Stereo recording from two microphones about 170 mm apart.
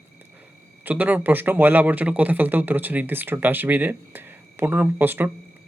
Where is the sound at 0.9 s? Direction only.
10° right (ahead or behind).